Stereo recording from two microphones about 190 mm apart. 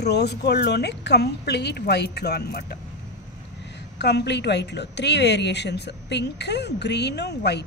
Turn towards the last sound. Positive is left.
turn(degrees=60)  # may be behind; listen again after turning